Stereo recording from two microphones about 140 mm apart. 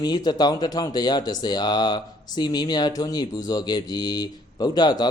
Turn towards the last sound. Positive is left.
turn(degrees=30)  # may be behind; listen again after turning